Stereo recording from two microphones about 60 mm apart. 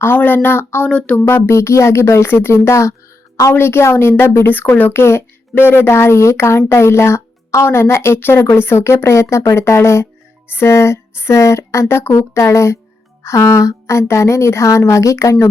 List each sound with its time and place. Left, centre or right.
0.2 s a woman's voice: left
0.9 s speech: centre
1.3 s speech: left
3.5 s a woman's voice: left